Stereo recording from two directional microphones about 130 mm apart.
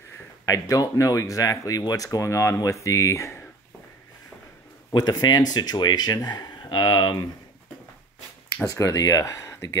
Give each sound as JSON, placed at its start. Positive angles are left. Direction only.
{"t": 0.5, "sound": "speech", "side_deg": 25}
{"t": 4.9, "sound": "speech", "side_deg": 30}
{"t": 8.6, "sound": "speech", "side_deg": 25}